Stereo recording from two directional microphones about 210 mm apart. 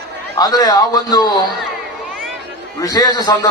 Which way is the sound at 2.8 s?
20° left (ahead or behind).